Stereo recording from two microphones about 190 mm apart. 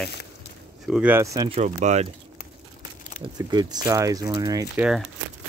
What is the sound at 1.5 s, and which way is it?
Speech, 40° right (ahead or behind).